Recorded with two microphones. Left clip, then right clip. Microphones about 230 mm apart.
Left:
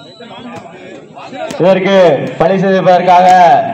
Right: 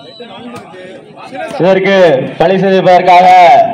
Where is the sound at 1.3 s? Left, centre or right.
Right.